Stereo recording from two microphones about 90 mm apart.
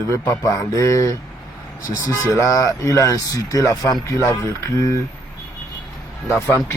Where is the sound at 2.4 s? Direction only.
40° left (ahead or behind).